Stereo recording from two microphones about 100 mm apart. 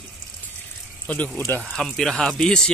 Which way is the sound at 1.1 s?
15° left (ahead or behind).